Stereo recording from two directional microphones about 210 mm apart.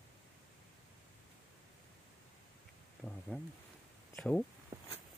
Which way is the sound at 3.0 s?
Centre (ahead or behind).